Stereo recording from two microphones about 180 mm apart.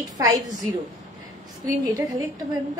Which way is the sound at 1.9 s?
20° right (ahead or behind).